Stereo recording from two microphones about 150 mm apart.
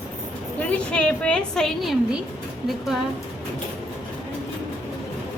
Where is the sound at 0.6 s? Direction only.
10° left (ahead or behind).